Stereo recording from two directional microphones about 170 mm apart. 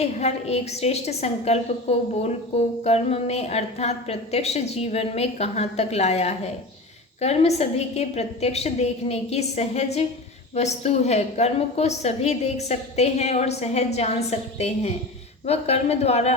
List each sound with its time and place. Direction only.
0.0 s a woman's voice: 40° left (ahead or behind)